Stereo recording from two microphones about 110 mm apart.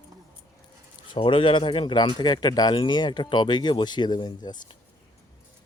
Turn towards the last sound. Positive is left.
turn(degrees=40)  # may be behind; listen again after turning